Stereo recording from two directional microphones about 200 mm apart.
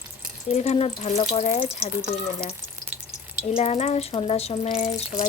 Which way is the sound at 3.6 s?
35° left (ahead or behind).